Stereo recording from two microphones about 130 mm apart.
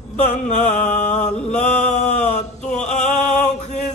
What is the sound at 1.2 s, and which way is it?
Mantra, 5° left (ahead or behind).